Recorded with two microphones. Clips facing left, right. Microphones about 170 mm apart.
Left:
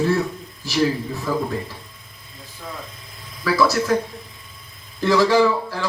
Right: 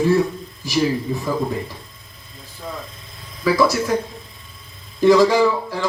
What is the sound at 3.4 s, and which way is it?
Speech, 15° right (ahead or behind).